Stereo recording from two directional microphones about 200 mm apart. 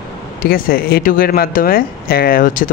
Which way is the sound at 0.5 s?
50° left (ahead or behind).